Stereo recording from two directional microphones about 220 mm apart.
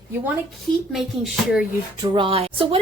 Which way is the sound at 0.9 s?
Centre (ahead or behind).